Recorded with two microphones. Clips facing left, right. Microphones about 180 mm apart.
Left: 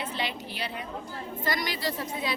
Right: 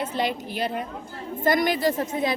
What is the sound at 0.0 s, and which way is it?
A woman's voice, 45° right (ahead or behind).